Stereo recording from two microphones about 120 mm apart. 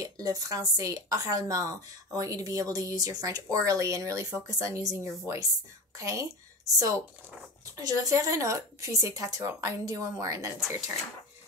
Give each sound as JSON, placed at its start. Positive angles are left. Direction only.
{"t": 0.0, "sound": "a woman's voice", "side_deg": -30}
{"t": 7.7, "sound": "a woman's voice", "side_deg": -30}